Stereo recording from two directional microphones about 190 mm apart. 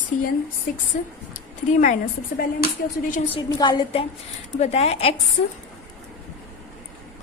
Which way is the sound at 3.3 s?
20° left (ahead or behind).